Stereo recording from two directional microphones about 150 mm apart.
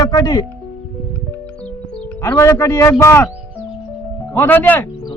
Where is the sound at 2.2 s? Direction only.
20° left (ahead or behind).